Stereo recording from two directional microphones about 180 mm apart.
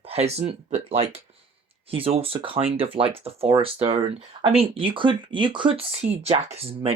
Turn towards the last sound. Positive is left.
turn(degrees=-30)  # may be behind; listen again after turning